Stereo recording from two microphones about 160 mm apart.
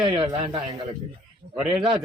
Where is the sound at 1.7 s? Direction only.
5° right (ahead or behind).